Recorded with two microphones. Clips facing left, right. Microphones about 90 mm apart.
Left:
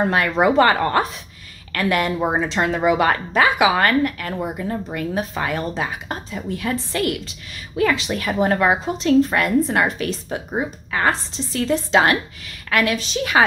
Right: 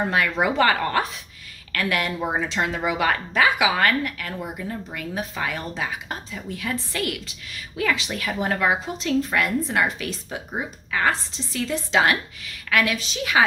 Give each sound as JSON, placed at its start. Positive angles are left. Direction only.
{"t": 0.0, "sound": "a woman's voice", "side_deg": 45}
{"t": 0.5, "sound": "a woman's voice", "side_deg": 30}